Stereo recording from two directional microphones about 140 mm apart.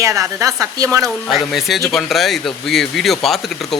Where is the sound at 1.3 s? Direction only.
Centre (ahead or behind).